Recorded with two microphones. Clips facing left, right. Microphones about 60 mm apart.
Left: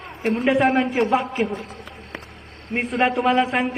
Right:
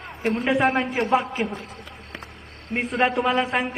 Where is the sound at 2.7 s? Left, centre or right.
Centre.